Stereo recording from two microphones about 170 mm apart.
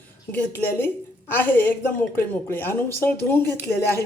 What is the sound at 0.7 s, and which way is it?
A woman's voice, 10° left (ahead or behind).